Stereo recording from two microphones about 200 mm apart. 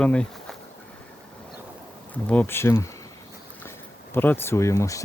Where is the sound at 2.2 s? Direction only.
10° left (ahead or behind).